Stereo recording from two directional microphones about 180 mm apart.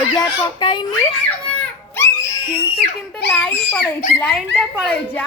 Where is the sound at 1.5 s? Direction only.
10° left (ahead or behind).